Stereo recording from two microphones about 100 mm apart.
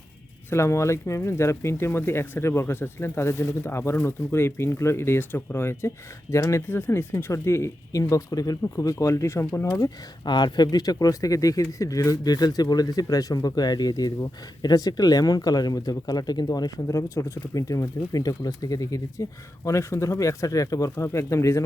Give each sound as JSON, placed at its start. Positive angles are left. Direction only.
{"t": 0.5, "sound": "speech", "side_deg": 30}
{"t": 9.8, "sound": "speech", "side_deg": 50}